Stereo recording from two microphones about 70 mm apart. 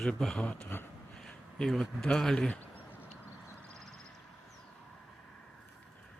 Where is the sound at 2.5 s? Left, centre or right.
Left.